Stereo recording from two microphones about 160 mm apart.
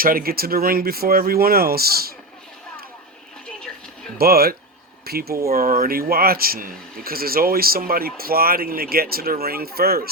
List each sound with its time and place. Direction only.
0.0 s speech: 65° right (ahead or behind)
4.2 s speech: 75° right (ahead or behind)